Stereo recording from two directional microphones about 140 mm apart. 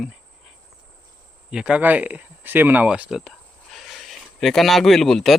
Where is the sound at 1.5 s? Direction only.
5° right (ahead or behind).